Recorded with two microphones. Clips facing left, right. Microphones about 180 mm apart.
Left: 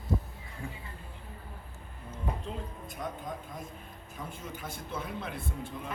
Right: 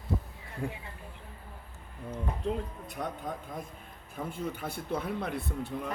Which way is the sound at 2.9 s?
60° right (ahead or behind).